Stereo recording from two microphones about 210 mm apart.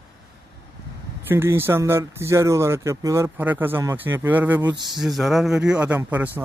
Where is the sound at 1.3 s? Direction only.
10° right (ahead or behind).